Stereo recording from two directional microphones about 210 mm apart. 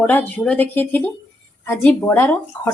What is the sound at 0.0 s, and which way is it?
Speech, 5° left (ahead or behind).